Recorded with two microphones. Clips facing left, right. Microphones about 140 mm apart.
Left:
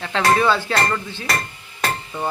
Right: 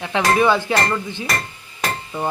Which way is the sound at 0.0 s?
15° right (ahead or behind).